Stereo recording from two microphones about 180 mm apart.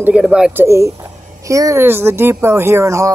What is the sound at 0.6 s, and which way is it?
Speech, 15° right (ahead or behind).